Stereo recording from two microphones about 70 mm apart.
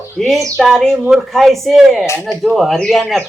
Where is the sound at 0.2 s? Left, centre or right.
Centre.